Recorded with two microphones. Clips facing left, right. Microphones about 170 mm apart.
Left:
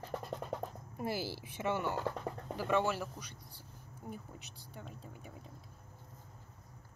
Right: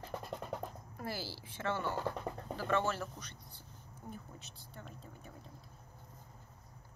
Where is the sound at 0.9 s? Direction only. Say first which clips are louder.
Left 6 dB; 20° left (ahead or behind).